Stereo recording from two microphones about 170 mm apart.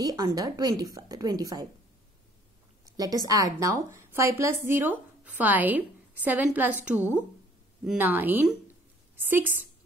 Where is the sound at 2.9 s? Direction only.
20° right (ahead or behind).